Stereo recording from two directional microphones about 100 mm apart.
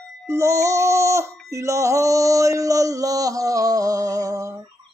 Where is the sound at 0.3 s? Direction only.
30° right (ahead or behind).